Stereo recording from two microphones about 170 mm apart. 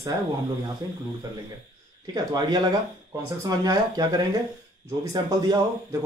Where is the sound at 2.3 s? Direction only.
20° right (ahead or behind).